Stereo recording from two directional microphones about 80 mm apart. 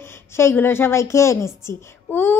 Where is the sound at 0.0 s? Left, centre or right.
Left.